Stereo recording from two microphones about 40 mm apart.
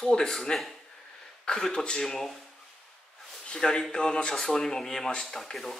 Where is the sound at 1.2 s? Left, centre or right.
Centre.